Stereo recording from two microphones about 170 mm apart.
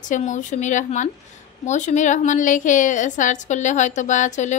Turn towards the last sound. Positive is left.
turn(degrees=45)  # may be behind; listen again after turning